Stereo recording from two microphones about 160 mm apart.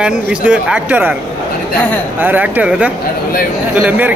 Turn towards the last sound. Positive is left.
turn(degrees=-10)  # may be behind; listen again after turning